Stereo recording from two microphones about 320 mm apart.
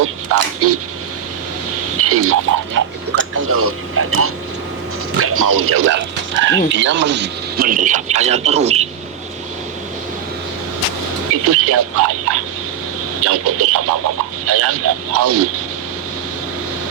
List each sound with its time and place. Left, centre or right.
0.0 s speech: right
2.0 s speech: right; by 8.9 s centre
11.4 s speech: right